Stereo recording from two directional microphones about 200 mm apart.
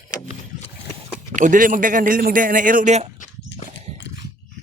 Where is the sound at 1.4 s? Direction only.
40° right (ahead or behind).